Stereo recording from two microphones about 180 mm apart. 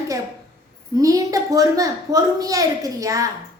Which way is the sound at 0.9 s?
20° right (ahead or behind).